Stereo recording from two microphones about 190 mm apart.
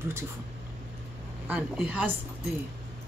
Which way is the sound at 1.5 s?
5° right (ahead or behind).